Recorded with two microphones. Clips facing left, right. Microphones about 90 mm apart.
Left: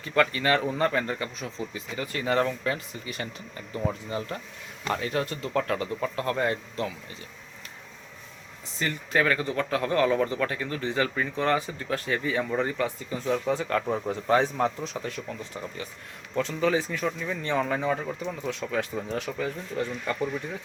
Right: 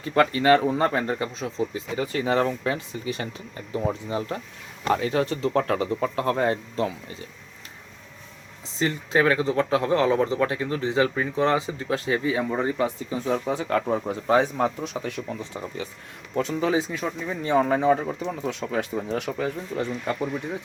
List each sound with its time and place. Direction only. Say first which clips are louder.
0.0 s speech: right 4 dB; 30° right (ahead or behind)
8.8 s speech: right 4 dB; 25° right (ahead or behind)